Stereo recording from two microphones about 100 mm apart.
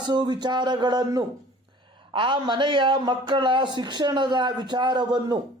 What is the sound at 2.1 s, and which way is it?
A man's voice, 55° right (ahead or behind).